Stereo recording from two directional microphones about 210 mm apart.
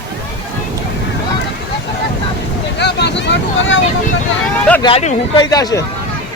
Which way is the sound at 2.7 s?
55° left (ahead or behind).